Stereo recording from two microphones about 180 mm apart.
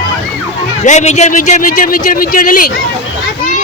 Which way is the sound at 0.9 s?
40° left (ahead or behind).